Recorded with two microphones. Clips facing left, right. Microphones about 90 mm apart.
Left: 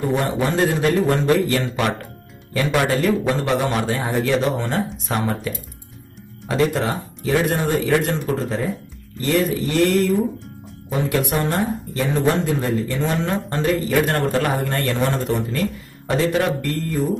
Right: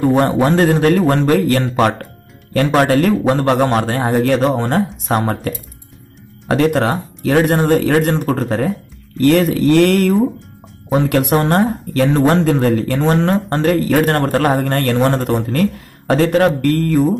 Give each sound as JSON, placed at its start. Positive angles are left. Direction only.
{"t": 0.0, "sound": "a man's voice", "side_deg": -55}
{"t": 9.2, "sound": "speech", "side_deg": -65}
{"t": 13.0, "sound": "a man's voice", "side_deg": -50}